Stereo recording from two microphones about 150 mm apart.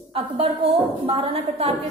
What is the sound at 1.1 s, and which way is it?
Speech, 40° right (ahead or behind).